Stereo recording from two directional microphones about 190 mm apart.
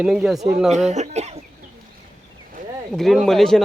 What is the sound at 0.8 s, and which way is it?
Speech, 35° right (ahead or behind).